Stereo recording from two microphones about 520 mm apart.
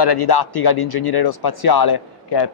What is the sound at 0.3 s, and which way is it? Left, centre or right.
A man's voice, left.